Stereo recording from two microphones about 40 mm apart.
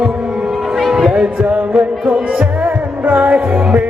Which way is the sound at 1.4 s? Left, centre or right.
Right.